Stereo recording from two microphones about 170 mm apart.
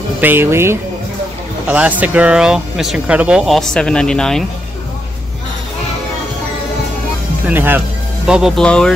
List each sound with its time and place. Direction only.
0.2 s speech: 10° right (ahead or behind); by 4.5 s 5° left (ahead or behind)
7.4 s speech: 10° right (ahead or behind)